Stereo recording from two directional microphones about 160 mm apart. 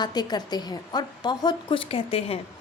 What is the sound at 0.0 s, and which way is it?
A woman's voice, 25° left (ahead or behind).